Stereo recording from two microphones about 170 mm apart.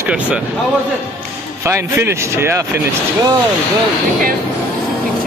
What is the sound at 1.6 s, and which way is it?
Speech, 15° right (ahead or behind).